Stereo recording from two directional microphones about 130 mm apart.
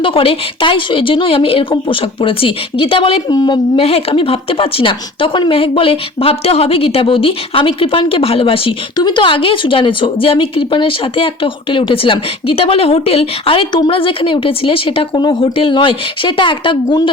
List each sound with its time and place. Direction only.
0.0 s speech: 45° left (ahead or behind)
3.3 s a woman's voice: 30° left (ahead or behind)
3.8 s speech: 45° left (ahead or behind)